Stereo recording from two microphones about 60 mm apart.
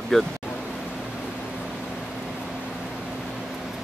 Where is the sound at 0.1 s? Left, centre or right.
Centre.